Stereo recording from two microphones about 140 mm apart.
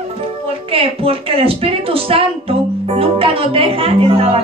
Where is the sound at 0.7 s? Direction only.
40° right (ahead or behind).